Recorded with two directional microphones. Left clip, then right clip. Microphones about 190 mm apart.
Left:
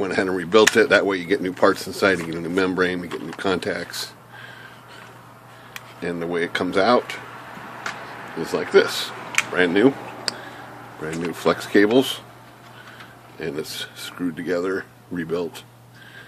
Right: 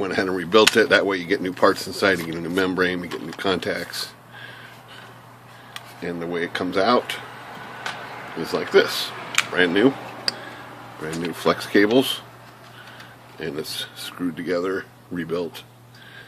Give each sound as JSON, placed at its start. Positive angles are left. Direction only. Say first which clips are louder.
{"t": 0.0, "sound": "speech", "louder": "left 1 dB", "side_deg": 5}
{"t": 5.7, "sound": "speech", "louder": "left 2 dB", "side_deg": 15}
{"t": 8.4, "sound": "speech", "louder": "left 1 dB", "side_deg": 5}
{"t": 13.4, "sound": "speech", "louder": "even", "side_deg": 5}